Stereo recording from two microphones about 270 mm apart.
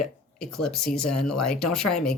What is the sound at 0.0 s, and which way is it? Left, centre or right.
Speech, centre.